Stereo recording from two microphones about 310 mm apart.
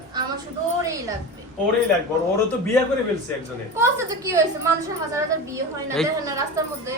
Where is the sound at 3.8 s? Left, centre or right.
Centre.